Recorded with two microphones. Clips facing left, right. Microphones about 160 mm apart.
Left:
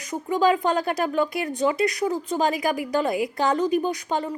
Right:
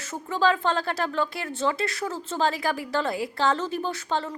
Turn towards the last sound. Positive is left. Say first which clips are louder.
# left 3 dB
turn(degrees=15)  # may be behind; listen again after turning